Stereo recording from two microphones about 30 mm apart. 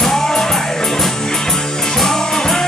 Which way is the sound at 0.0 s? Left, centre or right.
Centre.